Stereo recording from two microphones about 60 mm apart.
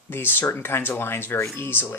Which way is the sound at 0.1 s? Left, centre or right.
Left.